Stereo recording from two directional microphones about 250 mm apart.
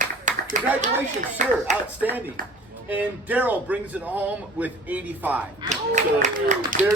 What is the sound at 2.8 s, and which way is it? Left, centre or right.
Speech, centre.